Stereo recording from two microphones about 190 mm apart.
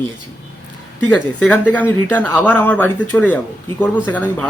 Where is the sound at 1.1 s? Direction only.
10° left (ahead or behind).